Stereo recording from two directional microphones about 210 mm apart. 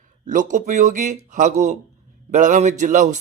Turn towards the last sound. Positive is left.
turn(degrees=-35)  # may be behind; listen again after turning